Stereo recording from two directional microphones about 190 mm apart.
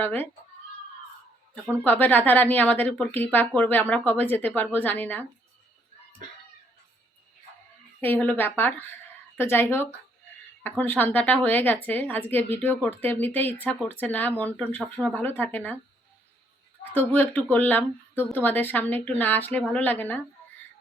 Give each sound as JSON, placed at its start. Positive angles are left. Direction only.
{"t": 0.0, "sound": "speech", "side_deg": 10}
{"t": 1.8, "sound": "speech", "side_deg": 10}
{"t": 8.0, "sound": "speech", "side_deg": 10}
{"t": 16.9, "sound": "speech", "side_deg": 10}